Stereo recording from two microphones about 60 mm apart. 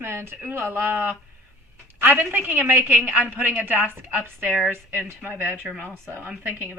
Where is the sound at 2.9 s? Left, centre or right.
Right.